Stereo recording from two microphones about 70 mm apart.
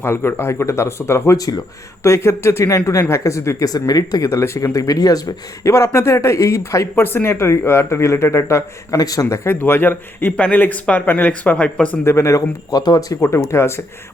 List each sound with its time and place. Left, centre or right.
0.0 s speech: left
1.4 s speech: left
2.0 s speech: left
3.7 s speech: left
4.3 s speech: left
5.6 s speech: left
7.0 s speech: left
9.0 s speech: left
9.4 s speech: left
10.3 s speech: centre
12.0 s speech: left
12.7 s speech: left
13.1 s speech: left